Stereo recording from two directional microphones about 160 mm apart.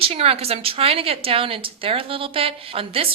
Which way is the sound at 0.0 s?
35° right (ahead or behind).